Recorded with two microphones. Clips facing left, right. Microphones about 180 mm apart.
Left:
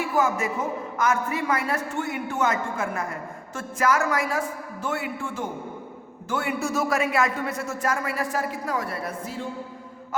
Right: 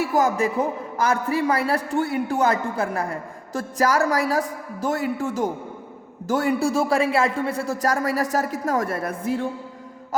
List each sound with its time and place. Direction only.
0.1 s a man's voice: 35° right (ahead or behind); by 9.5 s 55° right (ahead or behind)